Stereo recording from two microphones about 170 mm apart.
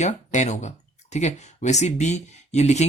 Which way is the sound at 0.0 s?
45° left (ahead or behind).